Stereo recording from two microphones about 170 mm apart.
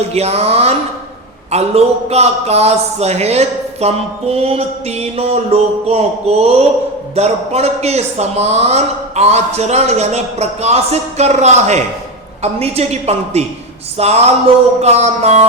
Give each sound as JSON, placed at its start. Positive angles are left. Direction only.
{"t": 0.1, "sound": "a man's voice", "side_deg": -40}